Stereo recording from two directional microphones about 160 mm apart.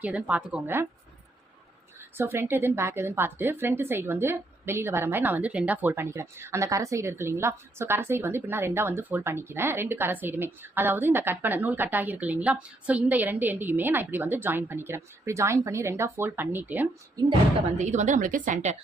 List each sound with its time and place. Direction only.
0.0 s a woman's voice: 10° right (ahead or behind)
2.0 s a woman's voice: 15° right (ahead or behind)
17.7 s a woman's voice: 50° right (ahead or behind)